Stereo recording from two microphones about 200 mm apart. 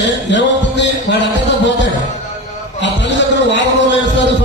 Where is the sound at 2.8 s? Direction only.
60° left (ahead or behind).